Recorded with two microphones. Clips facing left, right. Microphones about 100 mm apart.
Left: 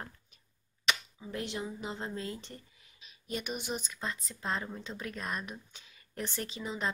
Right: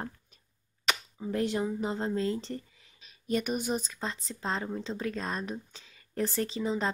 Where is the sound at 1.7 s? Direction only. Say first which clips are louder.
Right 8 dB; 40° right (ahead or behind).